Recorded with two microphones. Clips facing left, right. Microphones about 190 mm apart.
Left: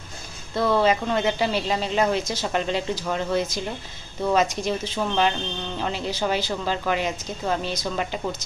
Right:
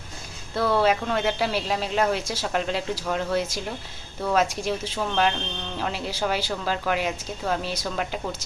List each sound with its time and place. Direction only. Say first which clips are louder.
0.6 s speech: left 1 dB; 5° right (ahead or behind)